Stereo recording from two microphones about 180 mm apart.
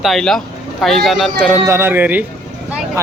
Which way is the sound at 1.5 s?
15° right (ahead or behind).